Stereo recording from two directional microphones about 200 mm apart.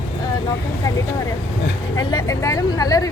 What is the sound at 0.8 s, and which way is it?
Speech, 20° left (ahead or behind).